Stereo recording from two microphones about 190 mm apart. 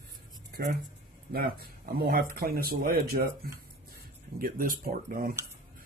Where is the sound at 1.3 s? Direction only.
50° right (ahead or behind).